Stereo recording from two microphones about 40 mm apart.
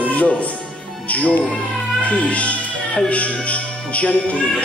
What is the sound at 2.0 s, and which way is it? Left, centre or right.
Music, left.